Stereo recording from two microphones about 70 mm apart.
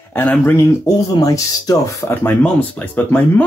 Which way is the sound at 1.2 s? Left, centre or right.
Left.